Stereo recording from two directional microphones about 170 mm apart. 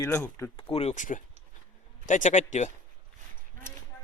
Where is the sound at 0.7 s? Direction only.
40° left (ahead or behind).